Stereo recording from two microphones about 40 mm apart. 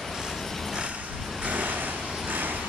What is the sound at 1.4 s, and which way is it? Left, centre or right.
Vehicle, right.